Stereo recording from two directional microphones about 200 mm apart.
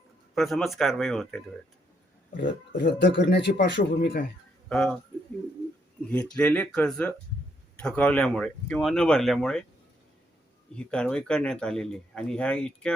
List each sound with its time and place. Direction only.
0.3 s speech: centre (ahead or behind)
2.7 s a man's voice: 60° left (ahead or behind)
4.7 s speech: 5° left (ahead or behind)
6.1 s speech: 5° left (ahead or behind)
10.8 s speech: 5° left (ahead or behind)